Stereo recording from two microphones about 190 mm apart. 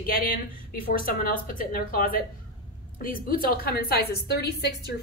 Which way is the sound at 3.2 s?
50° left (ahead or behind).